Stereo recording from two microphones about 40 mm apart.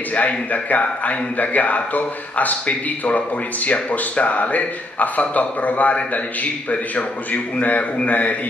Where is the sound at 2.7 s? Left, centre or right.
Left.